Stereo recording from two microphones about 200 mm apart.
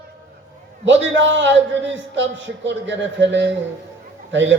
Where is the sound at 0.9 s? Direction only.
65° right (ahead or behind).